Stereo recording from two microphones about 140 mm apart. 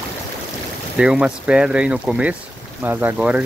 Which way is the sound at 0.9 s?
10° right (ahead or behind).